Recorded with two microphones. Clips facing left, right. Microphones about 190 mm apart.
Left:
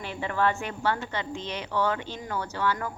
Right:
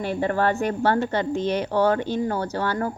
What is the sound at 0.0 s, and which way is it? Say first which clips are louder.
A woman's voice: right 5 dB; 45° right (ahead or behind).